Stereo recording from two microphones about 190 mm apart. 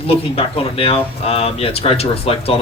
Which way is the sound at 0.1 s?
30° left (ahead or behind).